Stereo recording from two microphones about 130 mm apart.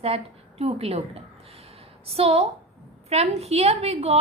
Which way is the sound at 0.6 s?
50° right (ahead or behind).